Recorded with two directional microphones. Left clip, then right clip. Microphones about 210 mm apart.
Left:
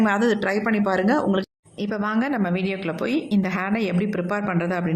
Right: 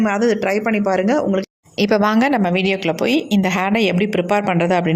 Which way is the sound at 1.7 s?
30° right (ahead or behind).